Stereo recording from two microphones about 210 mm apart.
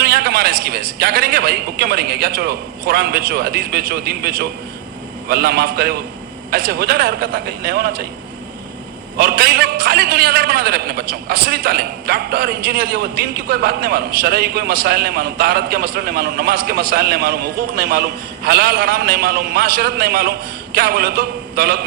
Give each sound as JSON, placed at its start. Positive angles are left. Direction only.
{"t": 0.0, "sound": "a man's voice", "side_deg": -50}
{"t": 9.1, "sound": "a man's voice", "side_deg": -50}